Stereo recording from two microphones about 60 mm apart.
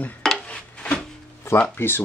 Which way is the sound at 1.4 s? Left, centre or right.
Left.